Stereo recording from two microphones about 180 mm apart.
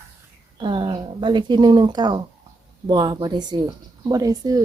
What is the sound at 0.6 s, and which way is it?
Speech, 25° right (ahead or behind).